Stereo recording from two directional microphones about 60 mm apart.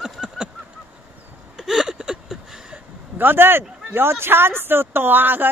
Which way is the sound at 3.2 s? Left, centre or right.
Right.